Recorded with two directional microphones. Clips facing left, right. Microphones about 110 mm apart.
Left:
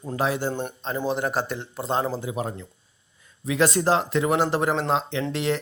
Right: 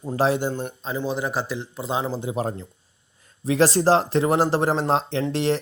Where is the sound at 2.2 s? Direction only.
35° right (ahead or behind).